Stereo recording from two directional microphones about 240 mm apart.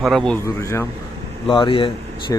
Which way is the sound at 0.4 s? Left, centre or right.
Centre.